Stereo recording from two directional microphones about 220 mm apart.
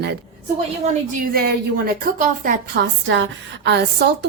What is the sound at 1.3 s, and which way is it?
A woman's voice, 45° right (ahead or behind).